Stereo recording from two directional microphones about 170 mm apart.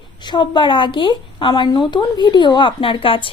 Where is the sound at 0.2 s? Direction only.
25° left (ahead or behind).